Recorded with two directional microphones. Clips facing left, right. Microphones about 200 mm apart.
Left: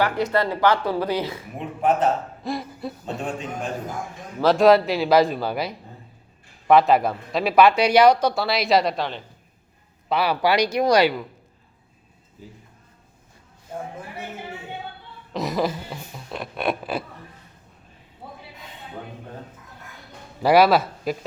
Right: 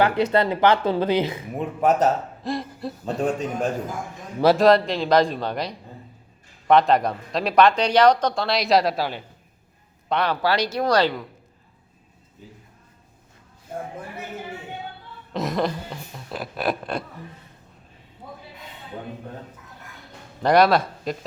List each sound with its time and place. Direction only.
0.0 s speech: 20° right (ahead or behind)
1.5 s a man's voice: 40° right (ahead or behind)
2.4 s chuckle: centre (ahead or behind)
3.2 s a man's voice: 40° right (ahead or behind)
4.4 s speech: centre (ahead or behind)
10.1 s speech: 5° left (ahead or behind)
15.3 s speech: centre (ahead or behind)
20.4 s speech: 5° left (ahead or behind)